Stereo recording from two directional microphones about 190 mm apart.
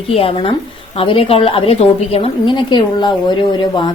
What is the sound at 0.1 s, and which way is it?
A woman's voice, 30° left (ahead or behind).